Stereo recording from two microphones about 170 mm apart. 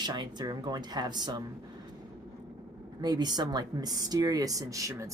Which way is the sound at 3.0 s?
25° right (ahead or behind).